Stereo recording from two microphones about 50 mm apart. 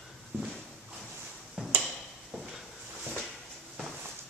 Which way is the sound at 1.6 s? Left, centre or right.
Centre.